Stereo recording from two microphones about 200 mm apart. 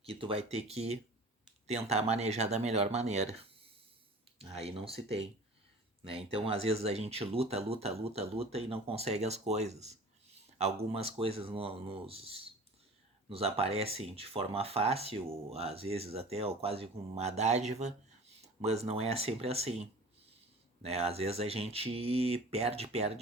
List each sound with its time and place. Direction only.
0.0 s speech: 30° right (ahead or behind)